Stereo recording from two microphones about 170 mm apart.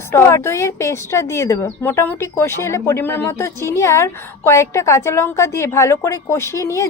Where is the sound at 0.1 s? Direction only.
15° left (ahead or behind).